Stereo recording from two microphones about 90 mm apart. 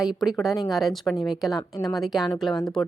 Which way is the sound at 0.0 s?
5° right (ahead or behind).